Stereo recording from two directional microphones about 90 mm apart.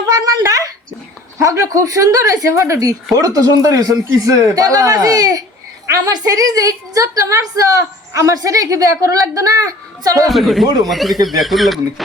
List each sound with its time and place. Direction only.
0.1 s a woman's voice: 40° right (ahead or behind)
5.8 s a woman's voice: 35° right (ahead or behind)
10.2 s speech: centre (ahead or behind)